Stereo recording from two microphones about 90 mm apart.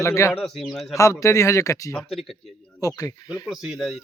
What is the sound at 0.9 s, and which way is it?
Speech, 35° left (ahead or behind).